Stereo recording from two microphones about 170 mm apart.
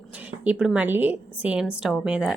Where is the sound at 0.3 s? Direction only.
5° right (ahead or behind).